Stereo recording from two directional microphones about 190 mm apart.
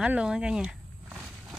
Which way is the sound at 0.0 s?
5° right (ahead or behind).